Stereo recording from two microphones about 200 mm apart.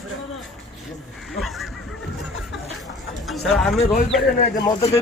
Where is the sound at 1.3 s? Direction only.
Centre (ahead or behind).